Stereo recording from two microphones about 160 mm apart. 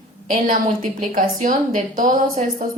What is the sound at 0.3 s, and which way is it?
A woman's voice, 55° right (ahead or behind).